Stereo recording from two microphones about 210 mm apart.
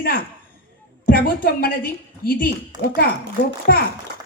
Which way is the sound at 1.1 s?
45° left (ahead or behind).